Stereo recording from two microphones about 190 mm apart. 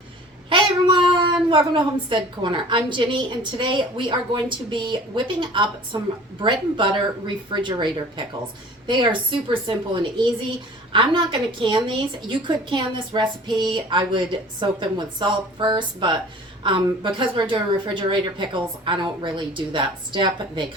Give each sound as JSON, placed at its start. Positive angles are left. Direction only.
{"t": 0.5, "sound": "a woman's voice", "side_deg": -25}